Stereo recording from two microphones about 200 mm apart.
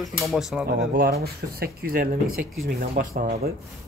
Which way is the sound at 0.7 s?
50° right (ahead or behind).